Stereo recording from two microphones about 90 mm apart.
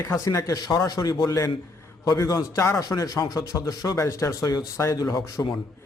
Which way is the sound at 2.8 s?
45° left (ahead or behind).